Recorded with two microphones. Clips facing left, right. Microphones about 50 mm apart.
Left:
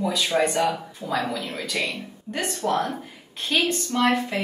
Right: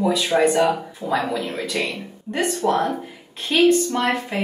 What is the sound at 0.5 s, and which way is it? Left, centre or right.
A woman's voice, right.